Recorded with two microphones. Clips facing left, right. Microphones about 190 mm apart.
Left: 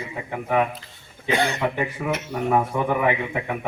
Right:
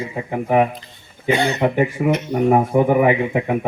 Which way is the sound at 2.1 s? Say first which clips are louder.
Right 7 dB; 5° left (ahead or behind).